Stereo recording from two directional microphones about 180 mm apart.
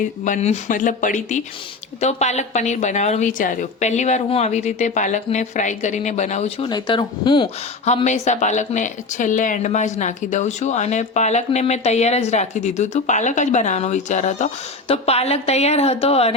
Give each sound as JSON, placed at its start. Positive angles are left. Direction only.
{"t": 0.0, "sound": "a woman's voice", "side_deg": 40}
{"t": 6.7, "sound": "speech", "side_deg": 25}
{"t": 7.9, "sound": "a woman's voice", "side_deg": 40}